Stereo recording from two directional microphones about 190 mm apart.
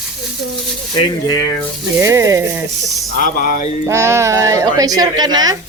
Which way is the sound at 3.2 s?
45° left (ahead or behind).